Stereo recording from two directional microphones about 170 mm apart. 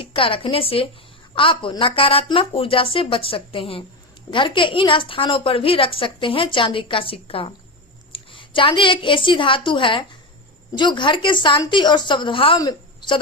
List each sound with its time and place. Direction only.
0.0 s a woman's voice: 30° left (ahead or behind)